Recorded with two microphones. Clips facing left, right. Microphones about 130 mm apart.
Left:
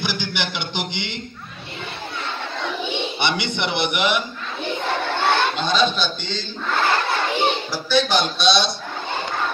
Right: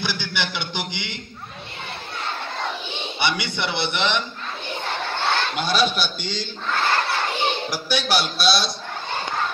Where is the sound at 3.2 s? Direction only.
20° left (ahead or behind).